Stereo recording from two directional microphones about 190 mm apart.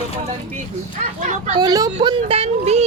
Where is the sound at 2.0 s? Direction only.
30° right (ahead or behind).